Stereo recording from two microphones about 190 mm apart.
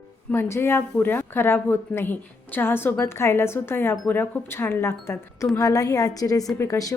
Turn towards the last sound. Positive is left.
turn(degrees=15)  # may be behind; listen again after turning